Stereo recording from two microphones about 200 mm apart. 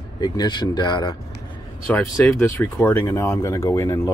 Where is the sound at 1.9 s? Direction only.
5° left (ahead or behind).